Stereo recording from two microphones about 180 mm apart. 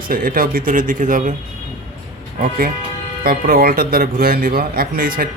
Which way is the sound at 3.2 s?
55° right (ahead or behind).